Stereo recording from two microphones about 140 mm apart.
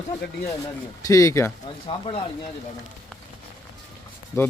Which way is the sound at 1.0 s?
25° left (ahead or behind).